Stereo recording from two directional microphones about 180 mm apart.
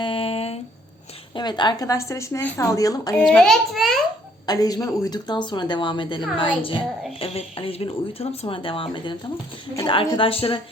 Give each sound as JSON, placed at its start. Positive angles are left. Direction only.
{"t": 0.0, "sound": "a sound", "side_deg": 30}
{"t": 1.4, "sound": "a woman's voice", "side_deg": 25}
{"t": 3.2, "sound": "a child's voice", "side_deg": 5}
{"t": 4.4, "sound": "a woman's voice", "side_deg": 20}